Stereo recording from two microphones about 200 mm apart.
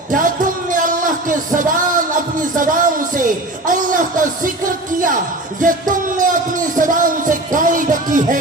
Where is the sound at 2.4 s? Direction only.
40° right (ahead or behind).